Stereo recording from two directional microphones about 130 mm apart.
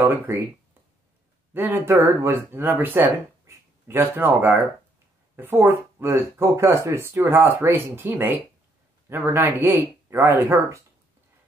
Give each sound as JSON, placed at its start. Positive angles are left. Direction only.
{"t": 0.3, "sound": "speech", "side_deg": -15}
{"t": 1.5, "sound": "speech", "side_deg": -15}